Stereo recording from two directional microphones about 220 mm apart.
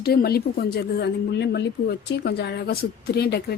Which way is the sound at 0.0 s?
45° left (ahead or behind).